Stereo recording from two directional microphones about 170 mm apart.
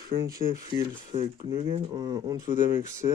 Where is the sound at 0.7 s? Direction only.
30° right (ahead or behind).